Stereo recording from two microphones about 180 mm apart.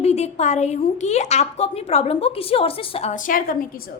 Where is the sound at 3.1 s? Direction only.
50° left (ahead or behind).